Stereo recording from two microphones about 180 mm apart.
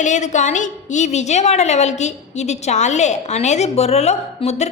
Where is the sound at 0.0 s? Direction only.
40° left (ahead or behind).